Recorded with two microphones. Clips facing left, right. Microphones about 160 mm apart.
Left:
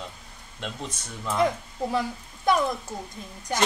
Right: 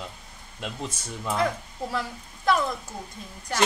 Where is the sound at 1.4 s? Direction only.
20° left (ahead or behind).